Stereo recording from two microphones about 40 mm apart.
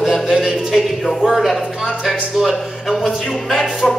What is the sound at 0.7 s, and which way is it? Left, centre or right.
Speech, centre.